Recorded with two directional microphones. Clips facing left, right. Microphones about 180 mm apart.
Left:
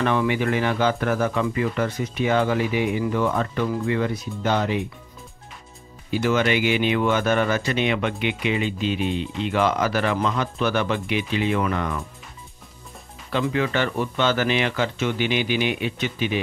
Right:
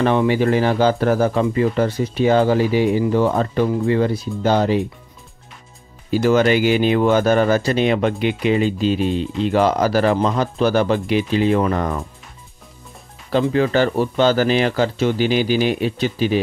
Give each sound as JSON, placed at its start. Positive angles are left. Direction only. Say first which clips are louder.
{"t": 0.0, "sound": "speech", "louder": "right 5 dB", "side_deg": -30}
{"t": 6.0, "sound": "speech", "louder": "right 6 dB", "side_deg": -40}
{"t": 13.3, "sound": "speech", "louder": "right 6 dB", "side_deg": -35}